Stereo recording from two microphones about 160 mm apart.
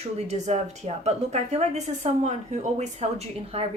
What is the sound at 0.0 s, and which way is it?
A woman's voice, 45° right (ahead or behind).